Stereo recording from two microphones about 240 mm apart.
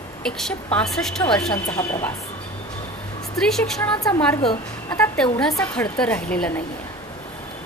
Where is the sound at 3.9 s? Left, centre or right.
Centre.